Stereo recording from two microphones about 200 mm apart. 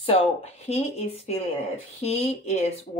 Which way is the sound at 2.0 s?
35° left (ahead or behind).